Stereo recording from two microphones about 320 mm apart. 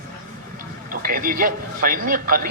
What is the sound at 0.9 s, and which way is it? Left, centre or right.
A man's voice, right.